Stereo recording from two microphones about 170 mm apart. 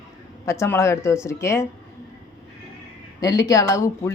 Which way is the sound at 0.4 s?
15° left (ahead or behind).